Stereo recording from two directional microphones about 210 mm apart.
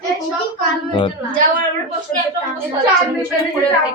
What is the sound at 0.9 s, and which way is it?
Speech, 25° left (ahead or behind).